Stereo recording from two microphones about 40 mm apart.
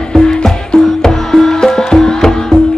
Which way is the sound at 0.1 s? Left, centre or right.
Centre.